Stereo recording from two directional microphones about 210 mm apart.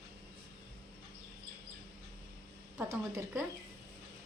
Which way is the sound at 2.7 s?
10° right (ahead or behind).